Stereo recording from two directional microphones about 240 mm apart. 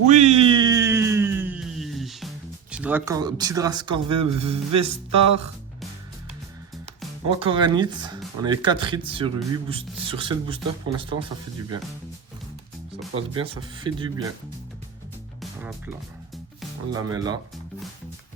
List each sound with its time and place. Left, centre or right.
0.1 s a sound: right; by 2.3 s centre
2.7 s speech: centre; by 4.9 s right
7.3 s speech: right
13.3 s speech: right
15.4 s music: centre
16.9 s speech: centre